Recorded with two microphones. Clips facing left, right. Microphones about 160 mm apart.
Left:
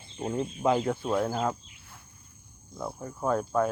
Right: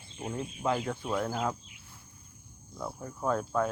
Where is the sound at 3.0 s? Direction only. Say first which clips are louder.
Left 3 dB; 5° left (ahead or behind).